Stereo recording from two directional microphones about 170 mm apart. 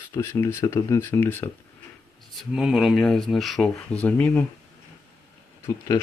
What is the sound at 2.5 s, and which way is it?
Speech, centre (ahead or behind).